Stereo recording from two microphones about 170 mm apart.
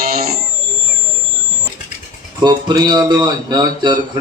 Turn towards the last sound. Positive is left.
turn(degrees=-25)  # may be behind; listen again after turning